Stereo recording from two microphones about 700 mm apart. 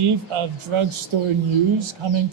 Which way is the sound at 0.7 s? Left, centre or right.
Right.